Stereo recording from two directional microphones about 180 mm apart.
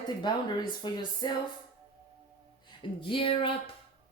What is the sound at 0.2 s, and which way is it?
Speech, 25° left (ahead or behind).